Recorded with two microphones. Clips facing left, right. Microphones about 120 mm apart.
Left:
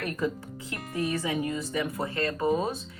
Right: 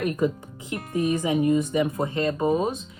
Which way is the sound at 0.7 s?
20° right (ahead or behind).